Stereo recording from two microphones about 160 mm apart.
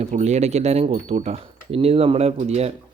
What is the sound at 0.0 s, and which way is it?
Speech, 45° right (ahead or behind).